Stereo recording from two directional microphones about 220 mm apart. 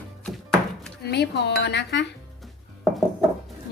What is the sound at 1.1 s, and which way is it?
Speech, 50° left (ahead or behind).